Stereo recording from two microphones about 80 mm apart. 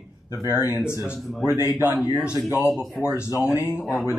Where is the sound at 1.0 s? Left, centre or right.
Centre.